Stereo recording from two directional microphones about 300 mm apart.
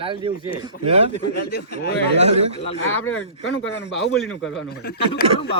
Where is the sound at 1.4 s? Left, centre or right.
Left.